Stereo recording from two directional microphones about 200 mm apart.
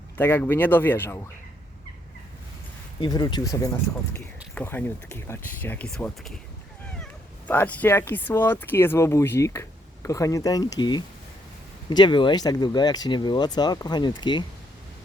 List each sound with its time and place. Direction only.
0.2 s speech: 10° left (ahead or behind)
3.0 s speech: 20° left (ahead or behind)